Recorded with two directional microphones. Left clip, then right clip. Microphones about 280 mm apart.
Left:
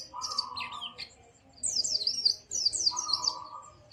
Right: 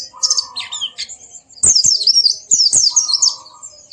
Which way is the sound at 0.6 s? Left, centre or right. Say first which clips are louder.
Right 14 dB; right.